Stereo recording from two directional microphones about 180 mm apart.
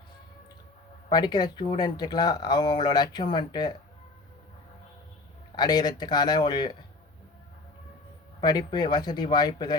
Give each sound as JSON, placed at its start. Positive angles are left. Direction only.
{"t": 1.1, "sound": "speech", "side_deg": 25}
{"t": 5.5, "sound": "speech", "side_deg": 25}
{"t": 8.4, "sound": "speech", "side_deg": 25}